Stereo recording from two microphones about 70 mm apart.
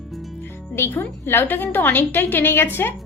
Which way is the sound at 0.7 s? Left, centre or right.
Left.